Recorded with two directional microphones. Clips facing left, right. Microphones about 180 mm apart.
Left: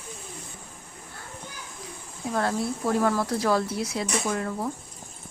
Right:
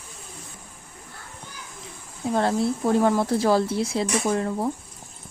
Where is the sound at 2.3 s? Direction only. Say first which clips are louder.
Right 4 dB; 25° right (ahead or behind).